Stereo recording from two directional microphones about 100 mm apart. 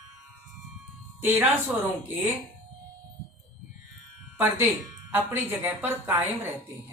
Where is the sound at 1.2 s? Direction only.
20° right (ahead or behind).